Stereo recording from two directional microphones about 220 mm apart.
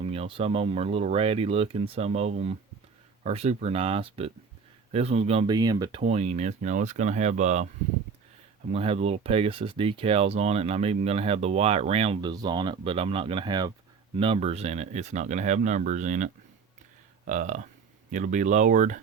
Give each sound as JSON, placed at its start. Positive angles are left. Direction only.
{"t": 0.0, "sound": "speech", "side_deg": -25}
{"t": 8.7, "sound": "speech", "side_deg": -25}